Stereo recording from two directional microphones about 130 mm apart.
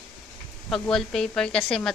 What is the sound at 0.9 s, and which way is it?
Speech, 5° left (ahead or behind).